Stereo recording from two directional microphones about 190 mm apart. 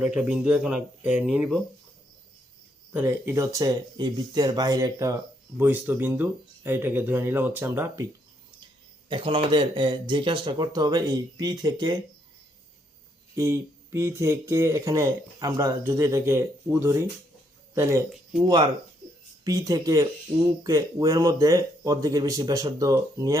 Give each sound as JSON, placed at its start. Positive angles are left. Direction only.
{"t": 0.0, "sound": "speech", "side_deg": -5}
{"t": 2.9, "sound": "speech", "side_deg": -10}
{"t": 9.0, "sound": "speech", "side_deg": -25}
{"t": 13.3, "sound": "speech", "side_deg": -15}